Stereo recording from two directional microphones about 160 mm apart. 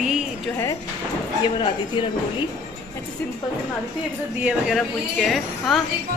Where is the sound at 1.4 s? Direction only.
30° left (ahead or behind).